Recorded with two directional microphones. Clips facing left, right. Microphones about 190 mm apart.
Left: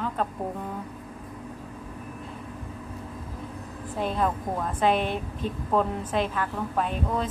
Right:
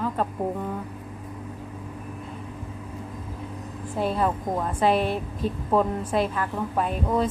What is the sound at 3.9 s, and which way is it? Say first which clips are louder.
A woman's voice: right 2 dB; 5° right (ahead or behind).